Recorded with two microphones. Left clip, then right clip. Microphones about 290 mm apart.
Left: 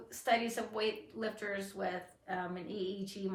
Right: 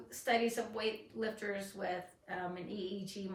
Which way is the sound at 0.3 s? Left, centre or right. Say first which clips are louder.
Left 1 dB; centre.